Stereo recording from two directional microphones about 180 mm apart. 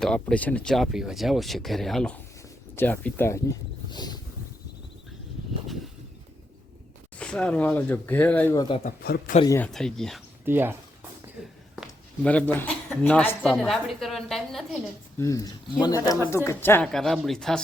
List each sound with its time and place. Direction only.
0.0 s speech: 5° left (ahead or behind)
3.8 s boat: 25° left (ahead or behind)
7.2 s speech: 5° left (ahead or behind)
8.8 s a man's voice: 60° left (ahead or behind)
9.6 s speech: 5° left (ahead or behind)
10.4 s speech: 10° right (ahead or behind)
11.8 s speech: 5° left (ahead or behind)
15.2 s speech: 20° left (ahead or behind); by 17.6 s 5° left (ahead or behind)